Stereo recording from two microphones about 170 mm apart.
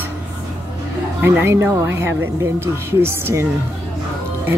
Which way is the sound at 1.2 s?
15° right (ahead or behind).